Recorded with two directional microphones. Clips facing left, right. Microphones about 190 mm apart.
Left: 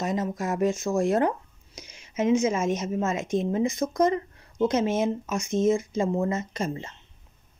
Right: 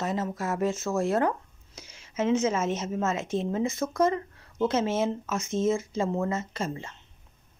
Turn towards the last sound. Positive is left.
turn(degrees=20)  # may be behind; listen again after turning